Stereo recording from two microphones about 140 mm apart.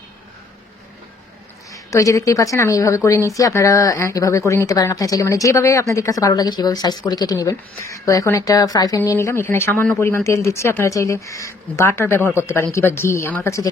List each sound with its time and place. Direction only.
1.7 s a woman's voice: 25° left (ahead or behind)